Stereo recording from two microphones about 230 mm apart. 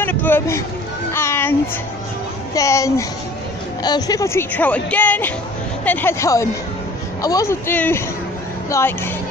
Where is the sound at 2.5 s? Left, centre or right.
Centre.